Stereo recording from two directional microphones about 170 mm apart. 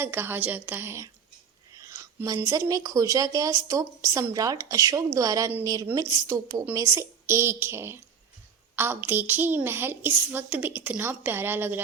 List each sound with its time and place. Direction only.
0.0 s a woman's voice: 15° right (ahead or behind)